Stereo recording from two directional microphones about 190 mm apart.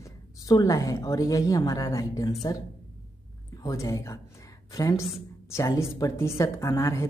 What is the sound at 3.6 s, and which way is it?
Speech, 15° left (ahead or behind).